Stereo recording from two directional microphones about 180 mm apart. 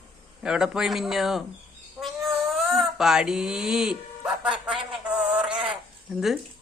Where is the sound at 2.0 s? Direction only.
Centre (ahead or behind).